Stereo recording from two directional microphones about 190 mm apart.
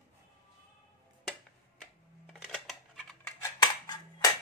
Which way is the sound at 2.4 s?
Centre (ahead or behind).